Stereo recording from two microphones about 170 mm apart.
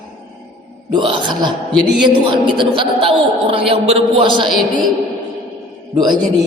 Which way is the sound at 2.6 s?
30° right (ahead or behind).